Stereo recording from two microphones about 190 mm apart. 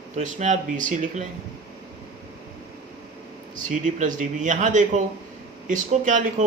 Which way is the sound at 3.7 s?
40° right (ahead or behind).